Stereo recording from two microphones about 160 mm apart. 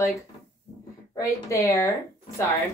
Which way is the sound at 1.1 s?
20° left (ahead or behind).